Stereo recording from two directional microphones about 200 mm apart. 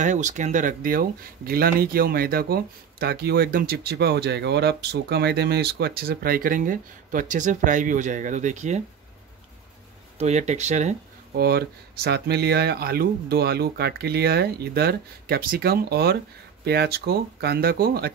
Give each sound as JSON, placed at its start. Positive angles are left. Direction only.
{"t": 0.0, "sound": "speech", "side_deg": -40}
{"t": 10.1, "sound": "speech", "side_deg": -35}
{"t": 11.3, "sound": "speech", "side_deg": -50}